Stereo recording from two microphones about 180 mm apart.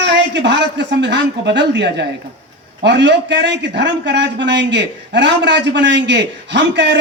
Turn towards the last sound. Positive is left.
turn(degrees=-80)